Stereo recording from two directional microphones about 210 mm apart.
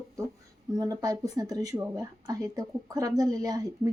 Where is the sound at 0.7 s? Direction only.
20° right (ahead or behind).